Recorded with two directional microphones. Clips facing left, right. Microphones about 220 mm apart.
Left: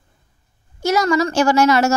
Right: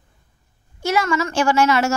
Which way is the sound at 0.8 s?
40° left (ahead or behind).